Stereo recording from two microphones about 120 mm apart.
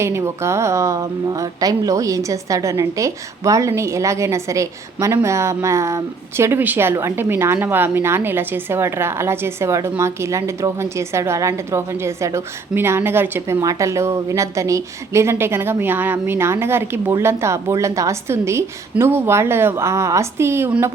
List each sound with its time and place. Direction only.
0.0 s a woman's voice: 25° right (ahead or behind)